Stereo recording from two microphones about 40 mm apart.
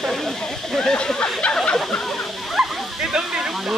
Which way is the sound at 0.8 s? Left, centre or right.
Centre.